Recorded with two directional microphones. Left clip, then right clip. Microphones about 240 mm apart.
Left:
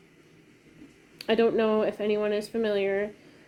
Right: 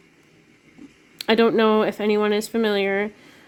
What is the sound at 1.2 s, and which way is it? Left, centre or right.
Speech, right.